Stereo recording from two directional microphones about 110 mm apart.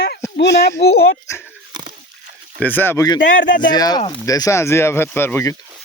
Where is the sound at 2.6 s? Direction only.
15° left (ahead or behind).